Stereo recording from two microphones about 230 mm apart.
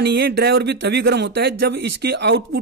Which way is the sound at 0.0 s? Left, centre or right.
Right.